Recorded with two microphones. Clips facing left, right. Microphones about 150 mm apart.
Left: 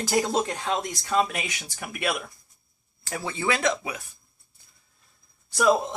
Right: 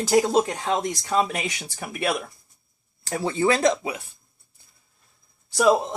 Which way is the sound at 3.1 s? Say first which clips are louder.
Right 6 dB; 35° right (ahead or behind).